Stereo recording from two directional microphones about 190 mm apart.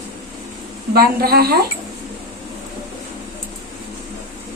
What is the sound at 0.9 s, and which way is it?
Speech, 55° right (ahead or behind).